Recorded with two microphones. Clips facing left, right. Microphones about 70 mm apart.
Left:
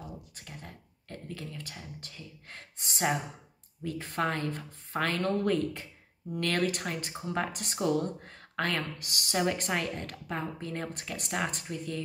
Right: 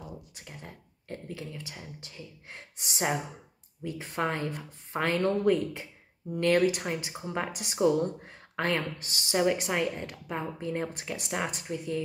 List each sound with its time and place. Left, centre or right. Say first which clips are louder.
0.5 s a sound: right 1 dB; right
2.5 s a woman's voice: right 1 dB; centre
9.5 s a woman's voice: right 3 dB; centre